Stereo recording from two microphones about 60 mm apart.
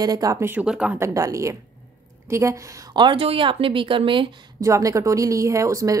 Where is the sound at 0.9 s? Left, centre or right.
Right.